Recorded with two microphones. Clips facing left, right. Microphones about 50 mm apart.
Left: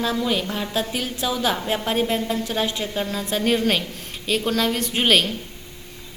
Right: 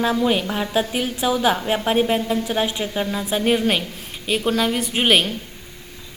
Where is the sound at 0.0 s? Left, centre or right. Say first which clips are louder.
Right 4 dB; right.